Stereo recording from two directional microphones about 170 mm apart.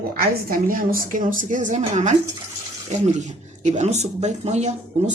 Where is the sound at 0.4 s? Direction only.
55° right (ahead or behind).